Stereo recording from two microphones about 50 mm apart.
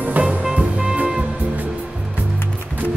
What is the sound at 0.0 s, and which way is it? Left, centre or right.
Music, right.